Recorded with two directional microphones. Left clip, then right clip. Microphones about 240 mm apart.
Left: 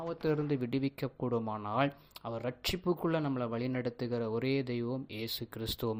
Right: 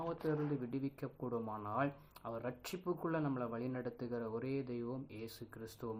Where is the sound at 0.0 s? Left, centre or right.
Left.